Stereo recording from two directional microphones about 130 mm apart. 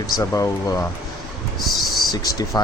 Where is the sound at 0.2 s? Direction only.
25° left (ahead or behind).